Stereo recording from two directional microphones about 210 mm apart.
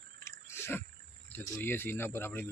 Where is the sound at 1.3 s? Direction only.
10° left (ahead or behind).